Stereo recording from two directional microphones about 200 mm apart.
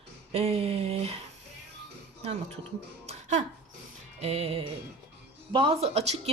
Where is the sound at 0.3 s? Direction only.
30° right (ahead or behind).